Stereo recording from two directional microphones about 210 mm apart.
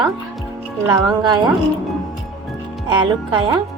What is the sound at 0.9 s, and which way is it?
Speech, 20° right (ahead or behind).